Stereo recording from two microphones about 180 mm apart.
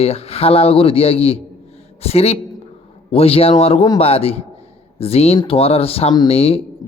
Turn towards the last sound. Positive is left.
turn(degrees=35)  # may be behind; listen again after turning